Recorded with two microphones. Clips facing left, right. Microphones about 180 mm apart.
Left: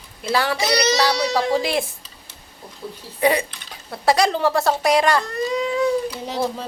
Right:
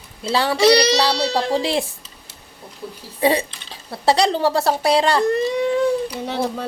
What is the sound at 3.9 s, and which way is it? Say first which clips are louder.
A child's voice: right 1 dB; 30° right (ahead or behind).